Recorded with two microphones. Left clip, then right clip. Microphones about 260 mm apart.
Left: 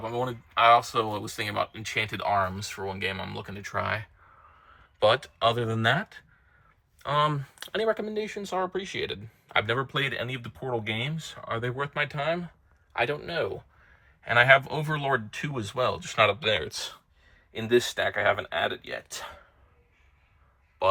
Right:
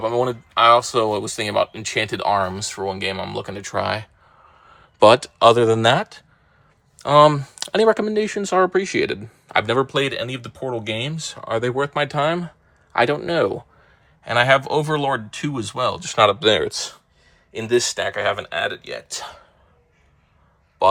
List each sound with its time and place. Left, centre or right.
0.5 s speech: centre
14.3 s speech: centre